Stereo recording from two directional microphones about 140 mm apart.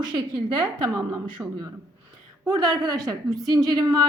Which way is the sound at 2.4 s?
25° right (ahead or behind).